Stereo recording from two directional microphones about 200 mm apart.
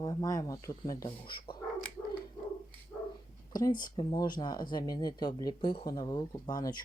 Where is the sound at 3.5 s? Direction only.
15° left (ahead or behind).